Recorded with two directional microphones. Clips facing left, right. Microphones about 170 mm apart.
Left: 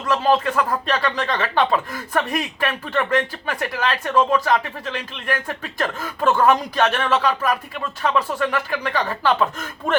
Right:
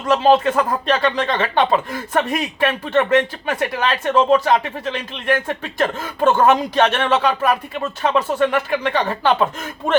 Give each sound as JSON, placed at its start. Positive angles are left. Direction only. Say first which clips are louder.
{"t": 0.3, "sound": "speech", "louder": "right 4 dB", "side_deg": -25}